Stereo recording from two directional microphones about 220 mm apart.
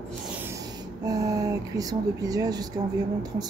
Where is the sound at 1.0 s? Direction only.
15° right (ahead or behind).